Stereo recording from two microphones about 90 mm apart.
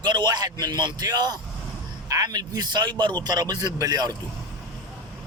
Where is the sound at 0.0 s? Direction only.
55° right (ahead or behind).